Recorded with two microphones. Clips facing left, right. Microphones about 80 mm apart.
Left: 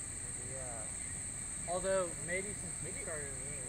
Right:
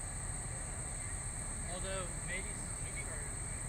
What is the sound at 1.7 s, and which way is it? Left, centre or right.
Speech, left.